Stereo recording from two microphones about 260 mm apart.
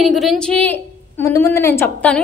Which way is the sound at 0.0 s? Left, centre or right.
Centre.